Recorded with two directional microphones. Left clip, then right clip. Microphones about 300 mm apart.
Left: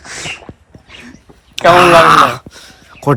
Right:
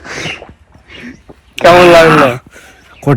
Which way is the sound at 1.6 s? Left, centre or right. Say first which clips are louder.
Right 2 dB; centre.